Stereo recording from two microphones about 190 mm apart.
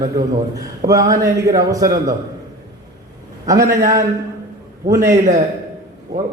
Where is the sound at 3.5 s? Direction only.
15° right (ahead or behind).